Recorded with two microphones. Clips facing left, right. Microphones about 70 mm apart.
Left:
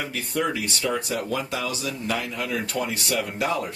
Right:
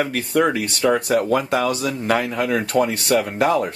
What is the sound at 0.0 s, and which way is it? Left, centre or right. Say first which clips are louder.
Speech: right 8 dB; right.